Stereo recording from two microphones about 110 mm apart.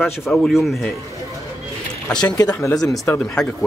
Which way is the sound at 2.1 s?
10° left (ahead or behind).